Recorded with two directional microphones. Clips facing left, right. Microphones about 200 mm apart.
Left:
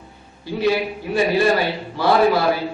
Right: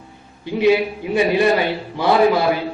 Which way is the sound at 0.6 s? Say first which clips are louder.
Right 4 dB; 15° right (ahead or behind).